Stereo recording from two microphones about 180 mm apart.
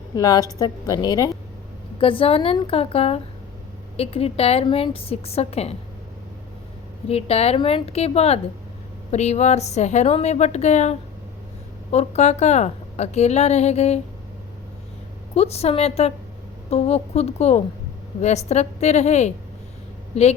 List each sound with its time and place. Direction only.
0.2 s a woman's voice: 20° left (ahead or behind)
7.1 s a woman's voice: 35° left (ahead or behind)
15.4 s a woman's voice: 35° left (ahead or behind)